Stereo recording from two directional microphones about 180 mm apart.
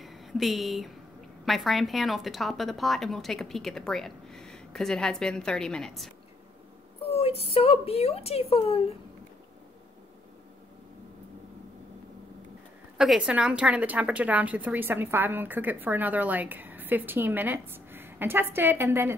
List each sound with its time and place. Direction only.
0.0 s a sound: centre (ahead or behind)
1.4 s a woman's voice: centre (ahead or behind)
7.1 s speech: 35° left (ahead or behind)
12.9 s a woman's voice: 5° right (ahead or behind)